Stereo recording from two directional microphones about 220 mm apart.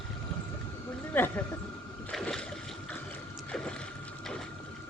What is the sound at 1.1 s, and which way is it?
Speech, 10° left (ahead or behind).